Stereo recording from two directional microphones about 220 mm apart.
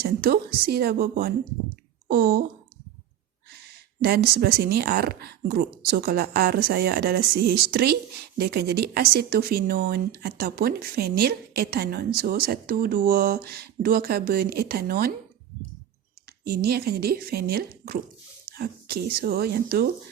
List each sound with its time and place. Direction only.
0.0 s speech: 45° right (ahead or behind)
4.0 s speech: 45° right (ahead or behind)
16.4 s speech: 45° right (ahead or behind)